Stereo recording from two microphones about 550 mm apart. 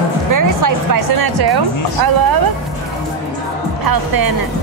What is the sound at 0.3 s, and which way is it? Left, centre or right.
Speech, right.